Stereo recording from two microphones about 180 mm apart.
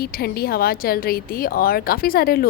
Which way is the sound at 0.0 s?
60° left (ahead or behind).